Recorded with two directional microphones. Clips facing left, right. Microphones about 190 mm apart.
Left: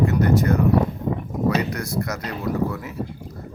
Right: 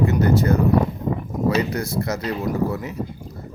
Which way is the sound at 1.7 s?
25° right (ahead or behind).